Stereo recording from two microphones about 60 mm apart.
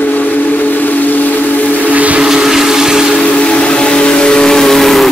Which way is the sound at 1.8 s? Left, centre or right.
Right.